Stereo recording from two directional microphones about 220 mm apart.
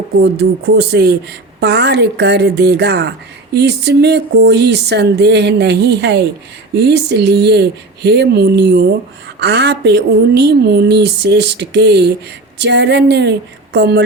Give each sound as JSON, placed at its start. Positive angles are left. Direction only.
{"t": 0.2, "sound": "a woman's voice", "side_deg": -50}